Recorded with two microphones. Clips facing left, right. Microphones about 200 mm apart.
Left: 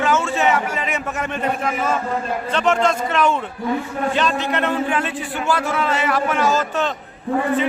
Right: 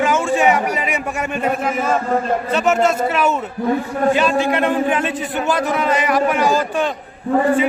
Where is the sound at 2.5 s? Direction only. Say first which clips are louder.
Right 1 dB; 5° right (ahead or behind).